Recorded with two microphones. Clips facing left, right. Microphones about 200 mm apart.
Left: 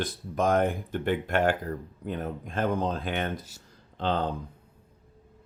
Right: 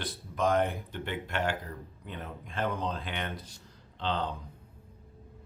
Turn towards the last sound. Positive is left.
turn(degrees=50)  # may be behind; listen again after turning